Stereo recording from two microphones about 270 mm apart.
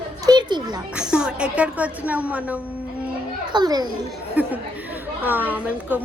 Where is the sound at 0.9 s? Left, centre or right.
Centre.